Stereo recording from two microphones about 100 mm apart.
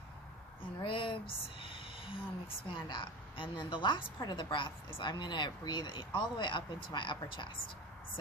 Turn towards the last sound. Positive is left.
turn(degrees=55)  # may be behind; listen again after turning